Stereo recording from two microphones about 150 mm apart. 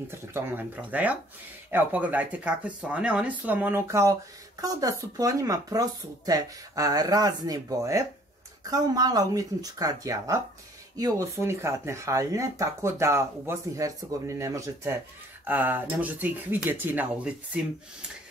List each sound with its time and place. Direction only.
0.1 s speech: 15° right (ahead or behind)